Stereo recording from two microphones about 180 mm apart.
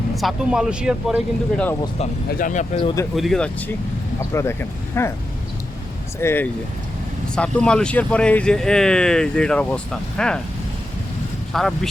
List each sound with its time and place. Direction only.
0.1 s speech: centre (ahead or behind)
2.4 s speech: 45° left (ahead or behind)
3.2 s speech: centre (ahead or behind)
4.9 s speech: 15° left (ahead or behind)
6.1 s speech: 10° left (ahead or behind)
11.5 s speech: centre (ahead or behind)